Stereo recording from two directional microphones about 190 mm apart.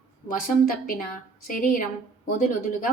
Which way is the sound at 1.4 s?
45° left (ahead or behind).